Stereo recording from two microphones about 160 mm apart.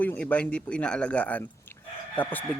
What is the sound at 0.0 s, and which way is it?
A man's voice, 10° left (ahead or behind).